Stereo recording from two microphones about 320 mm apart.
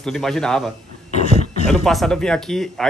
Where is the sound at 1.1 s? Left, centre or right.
Left.